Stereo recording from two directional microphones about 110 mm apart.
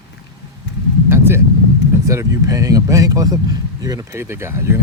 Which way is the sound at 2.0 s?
30° right (ahead or behind).